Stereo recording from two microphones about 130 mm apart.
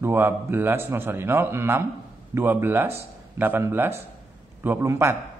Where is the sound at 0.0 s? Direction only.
15° right (ahead or behind).